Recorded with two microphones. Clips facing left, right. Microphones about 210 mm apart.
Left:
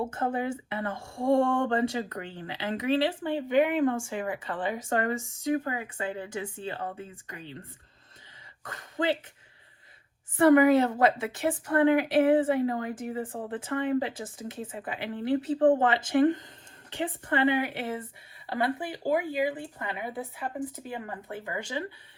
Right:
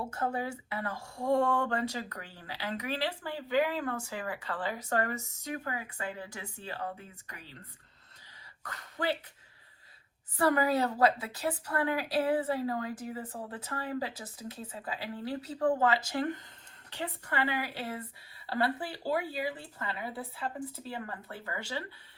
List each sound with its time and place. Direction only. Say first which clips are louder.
0.0 s speech: left 4 dB; 25° left (ahead or behind)
8.6 s speech: left 5 dB; 20° left (ahead or behind)
10.3 s speech: left 8 dB; 25° left (ahead or behind)